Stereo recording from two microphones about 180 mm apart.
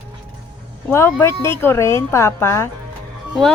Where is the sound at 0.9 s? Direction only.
15° left (ahead or behind).